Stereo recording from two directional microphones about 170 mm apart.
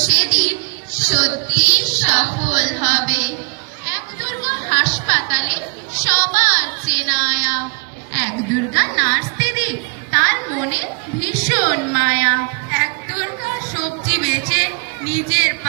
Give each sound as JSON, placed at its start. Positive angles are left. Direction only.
{"t": 0.1, "sound": "a sound", "side_deg": 45}
{"t": 0.9, "sound": "a woman's voice", "side_deg": 50}
{"t": 9.0, "sound": "a woman's voice", "side_deg": 55}